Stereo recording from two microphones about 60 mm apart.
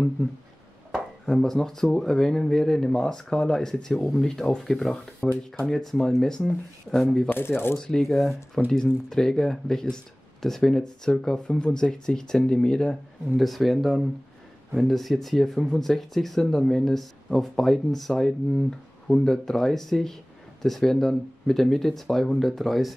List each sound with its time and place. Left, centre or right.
1.2 s speech: centre
7.2 s speech: left
7.8 s speech: centre
13.4 s speech: centre